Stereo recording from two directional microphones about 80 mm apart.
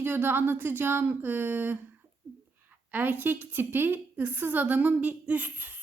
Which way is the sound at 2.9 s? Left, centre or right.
Right.